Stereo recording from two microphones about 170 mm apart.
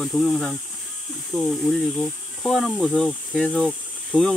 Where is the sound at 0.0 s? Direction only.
Centre (ahead or behind).